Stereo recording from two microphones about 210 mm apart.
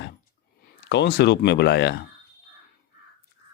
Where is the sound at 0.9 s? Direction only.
55° left (ahead or behind).